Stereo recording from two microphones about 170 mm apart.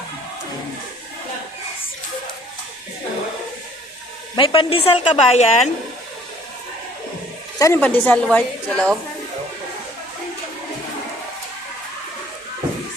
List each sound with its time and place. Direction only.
4.4 s speech: 30° left (ahead or behind)
7.6 s a woman's voice: 15° left (ahead or behind)